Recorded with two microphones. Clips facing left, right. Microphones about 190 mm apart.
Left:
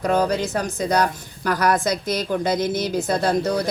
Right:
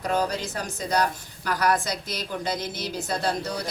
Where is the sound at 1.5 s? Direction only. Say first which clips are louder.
Left 5 dB; 45° left (ahead or behind).